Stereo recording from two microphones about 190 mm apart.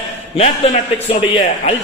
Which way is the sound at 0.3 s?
35° left (ahead or behind).